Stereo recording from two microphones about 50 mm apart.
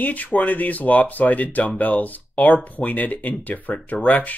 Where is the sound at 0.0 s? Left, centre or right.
Left.